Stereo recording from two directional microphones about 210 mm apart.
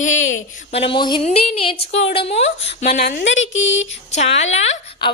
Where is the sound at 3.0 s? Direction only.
50° left (ahead or behind).